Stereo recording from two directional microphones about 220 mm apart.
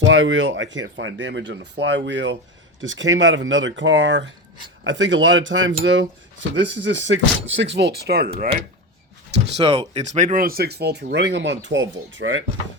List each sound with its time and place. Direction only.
0.0 s speech: 60° right (ahead or behind)
9.5 s speech: 30° right (ahead or behind); by 12.5 s 60° right (ahead or behind)